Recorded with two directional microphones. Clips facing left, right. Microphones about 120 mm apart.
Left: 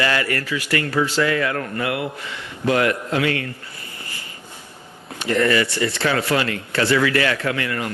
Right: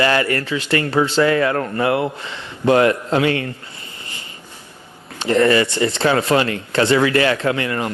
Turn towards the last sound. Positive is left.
turn(degrees=-25)  # may be behind; listen again after turning